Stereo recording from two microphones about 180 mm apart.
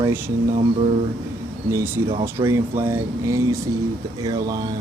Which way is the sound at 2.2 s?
15° right (ahead or behind).